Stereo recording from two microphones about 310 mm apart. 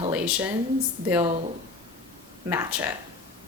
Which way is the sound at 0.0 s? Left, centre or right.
Centre.